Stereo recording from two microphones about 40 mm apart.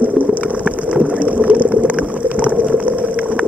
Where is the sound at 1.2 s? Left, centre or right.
Right.